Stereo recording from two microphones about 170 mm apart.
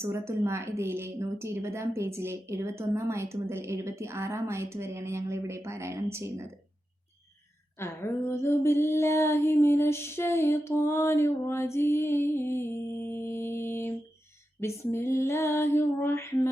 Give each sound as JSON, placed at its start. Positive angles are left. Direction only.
{"t": 0.0, "sound": "a woman's voice", "side_deg": -15}
{"t": 7.8, "sound": "female singing", "side_deg": 15}